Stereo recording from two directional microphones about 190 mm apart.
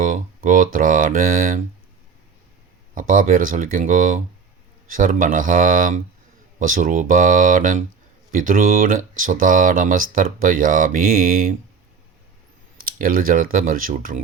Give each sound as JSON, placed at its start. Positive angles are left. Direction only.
{"t": 0.0, "sound": "speech", "side_deg": -45}
{"t": 2.9, "sound": "speech", "side_deg": -45}
{"t": 12.8, "sound": "speech", "side_deg": -50}